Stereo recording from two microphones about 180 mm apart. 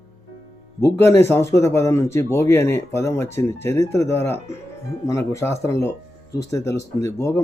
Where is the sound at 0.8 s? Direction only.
15° left (ahead or behind).